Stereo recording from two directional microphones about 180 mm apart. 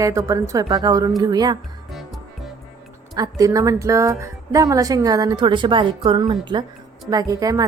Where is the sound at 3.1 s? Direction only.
20° right (ahead or behind).